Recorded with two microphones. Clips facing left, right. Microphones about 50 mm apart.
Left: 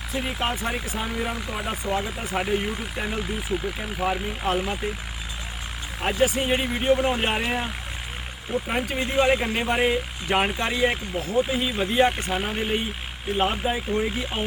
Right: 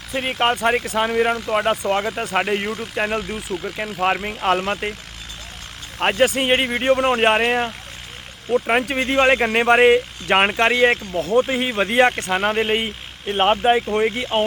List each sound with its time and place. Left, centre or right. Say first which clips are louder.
0.2 s speech: right 8 dB; right
6.0 s speech: right 5 dB; right